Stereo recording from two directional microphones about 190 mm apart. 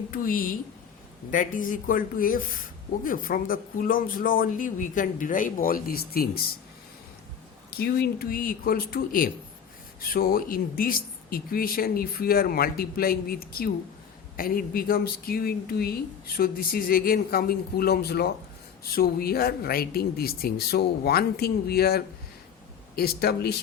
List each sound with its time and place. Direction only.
0.1 s speech: 50° left (ahead or behind)
7.7 s speech: 55° left (ahead or behind)